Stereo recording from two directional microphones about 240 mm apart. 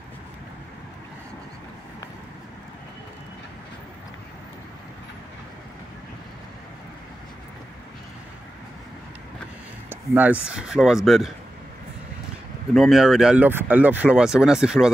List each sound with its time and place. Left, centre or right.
9.8 s speech: centre
12.7 s speech: centre